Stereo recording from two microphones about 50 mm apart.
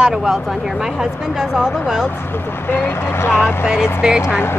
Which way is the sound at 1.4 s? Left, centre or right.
Centre.